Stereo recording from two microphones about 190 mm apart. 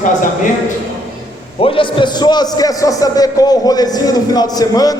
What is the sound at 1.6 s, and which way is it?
A man's voice, 25° left (ahead or behind).